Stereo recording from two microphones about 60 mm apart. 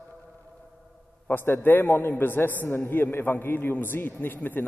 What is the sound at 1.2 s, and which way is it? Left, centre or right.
A man's voice, left.